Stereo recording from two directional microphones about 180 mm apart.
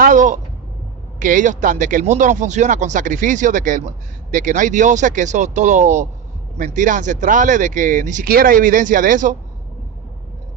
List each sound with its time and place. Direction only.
0.0 s speech: 45° right (ahead or behind)